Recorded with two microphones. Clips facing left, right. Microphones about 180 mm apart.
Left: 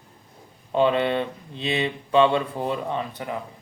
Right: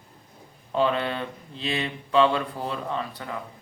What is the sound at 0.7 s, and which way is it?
A man's voice, 20° left (ahead or behind).